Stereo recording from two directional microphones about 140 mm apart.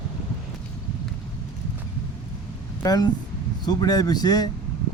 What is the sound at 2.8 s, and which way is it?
Speech, 30° left (ahead or behind).